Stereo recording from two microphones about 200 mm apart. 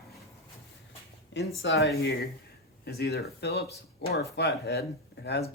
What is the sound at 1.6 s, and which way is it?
Speech, 55° left (ahead or behind).